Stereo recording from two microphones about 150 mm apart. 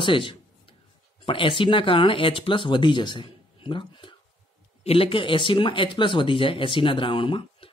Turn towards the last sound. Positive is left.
turn(degrees=35)  # may be behind; listen again after turning